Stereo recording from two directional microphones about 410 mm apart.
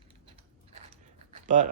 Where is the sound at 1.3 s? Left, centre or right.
Centre.